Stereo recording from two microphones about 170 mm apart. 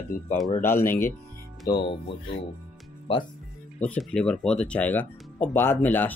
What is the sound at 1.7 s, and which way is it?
Speech, 30° left (ahead or behind).